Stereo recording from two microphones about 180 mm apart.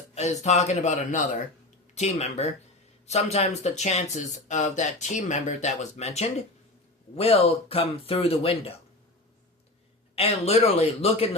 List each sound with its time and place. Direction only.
0.1 s speech: 40° left (ahead or behind)
10.2 s speech: 35° left (ahead or behind)